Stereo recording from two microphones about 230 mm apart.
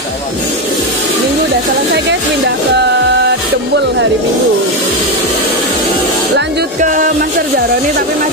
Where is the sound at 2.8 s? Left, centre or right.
Right.